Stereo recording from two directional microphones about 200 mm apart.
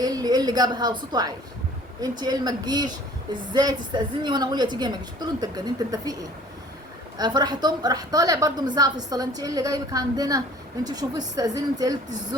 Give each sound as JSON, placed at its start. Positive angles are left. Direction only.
{"t": 0.0, "sound": "a woman's voice", "side_deg": -20}
{"t": 7.2, "sound": "a woman's voice", "side_deg": -20}